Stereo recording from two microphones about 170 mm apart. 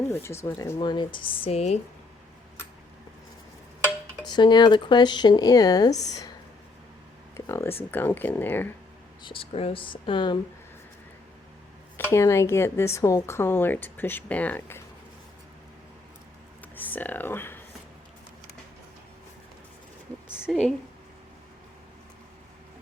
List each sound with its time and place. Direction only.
0.1 s a woman's voice: 15° left (ahead or behind)
0.8 s speech: 30° left (ahead or behind)
4.3 s speech: 25° left (ahead or behind)
7.3 s a sound: 15° left (ahead or behind)
7.9 s a woman's voice: 10° left (ahead or behind)
9.2 s speech: 30° left (ahead or behind)
12.1 s a woman's voice: 15° left (ahead or behind)
16.7 s speech: 10° left (ahead or behind)
20.5 s a woman's voice: centre (ahead or behind)